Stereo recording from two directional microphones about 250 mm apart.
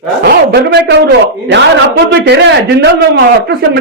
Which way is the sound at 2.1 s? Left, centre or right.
Right.